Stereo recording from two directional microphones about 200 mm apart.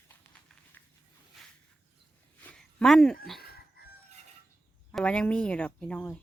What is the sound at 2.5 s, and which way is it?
Speech, 5° left (ahead or behind).